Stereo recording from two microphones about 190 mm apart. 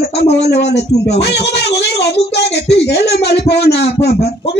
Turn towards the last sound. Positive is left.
turn(degrees=60)  # may be behind; listen again after turning